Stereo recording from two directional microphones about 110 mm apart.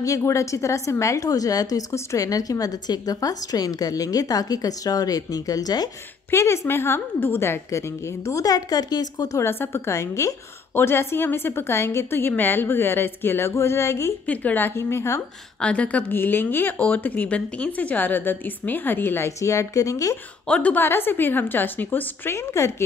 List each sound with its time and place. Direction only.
0.0 s a woman's voice: 30° left (ahead or behind)
6.3 s a woman's voice: 25° left (ahead or behind)
8.3 s a woman's voice: 35° left (ahead or behind)
9.4 s a woman's voice: 20° left (ahead or behind)
14.2 s a woman's voice: 15° left (ahead or behind)
15.6 s speech: 10° left (ahead or behind); by 20.2 s 30° left (ahead or behind)
20.4 s a woman's voice: 10° left (ahead or behind)